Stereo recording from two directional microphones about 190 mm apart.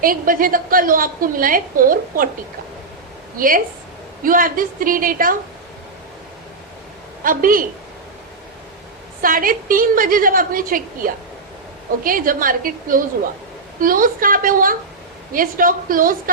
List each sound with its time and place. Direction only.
0.0 s a woman's voice: 45° right (ahead or behind)
3.3 s a woman's voice: 45° right (ahead or behind)
7.3 s a woman's voice: 45° right (ahead or behind)
9.2 s a woman's voice: 50° right (ahead or behind)